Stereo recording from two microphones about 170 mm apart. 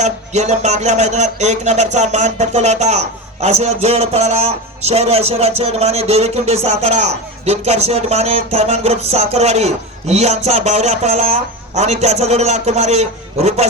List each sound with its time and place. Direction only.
0.0 s music: 45° right (ahead or behind)